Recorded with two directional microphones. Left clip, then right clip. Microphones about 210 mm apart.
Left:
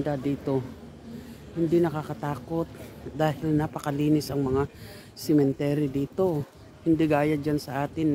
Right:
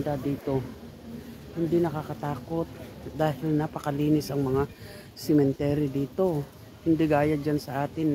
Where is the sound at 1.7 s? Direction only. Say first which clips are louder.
Left 2 dB; 30° left (ahead or behind).